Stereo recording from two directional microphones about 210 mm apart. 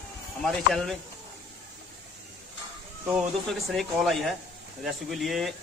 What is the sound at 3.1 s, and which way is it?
A man's voice, centre (ahead or behind).